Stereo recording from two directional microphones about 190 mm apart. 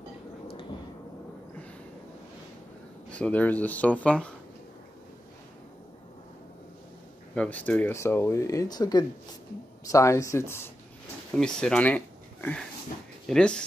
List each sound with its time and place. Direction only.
3.1 s speech: 5° left (ahead or behind)
7.3 s speech: 10° left (ahead or behind)